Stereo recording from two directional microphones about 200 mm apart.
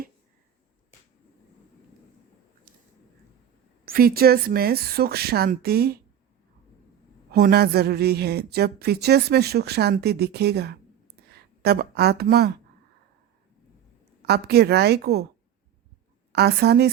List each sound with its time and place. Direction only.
3.8 s a woman's voice: 50° right (ahead or behind)
7.3 s a woman's voice: 50° right (ahead or behind)
14.2 s a woman's voice: 55° right (ahead or behind)
16.3 s a woman's voice: 55° right (ahead or behind)